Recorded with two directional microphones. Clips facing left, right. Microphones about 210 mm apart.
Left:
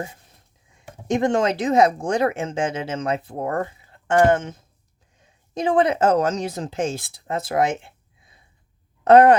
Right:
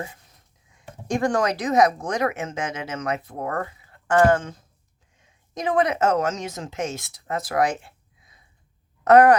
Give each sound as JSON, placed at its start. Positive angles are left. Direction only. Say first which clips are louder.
{"t": 1.0, "sound": "a woman's voice", "louder": "left 3 dB", "side_deg": 20}